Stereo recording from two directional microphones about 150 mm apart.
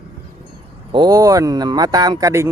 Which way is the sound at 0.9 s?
30° right (ahead or behind).